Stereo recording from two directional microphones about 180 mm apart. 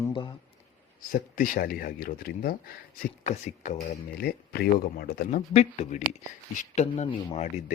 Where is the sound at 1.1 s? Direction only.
50° left (ahead or behind).